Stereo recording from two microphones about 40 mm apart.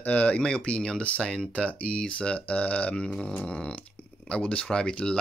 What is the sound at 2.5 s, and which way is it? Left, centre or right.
Speech, left.